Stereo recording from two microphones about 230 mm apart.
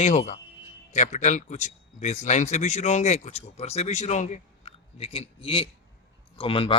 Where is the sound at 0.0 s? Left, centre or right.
Left.